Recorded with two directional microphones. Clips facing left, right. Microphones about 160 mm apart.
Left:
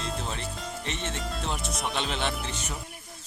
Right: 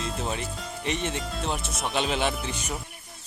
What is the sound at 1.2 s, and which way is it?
Speech, centre (ahead or behind).